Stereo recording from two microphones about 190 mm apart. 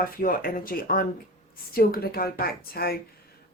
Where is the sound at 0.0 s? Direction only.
50° left (ahead or behind).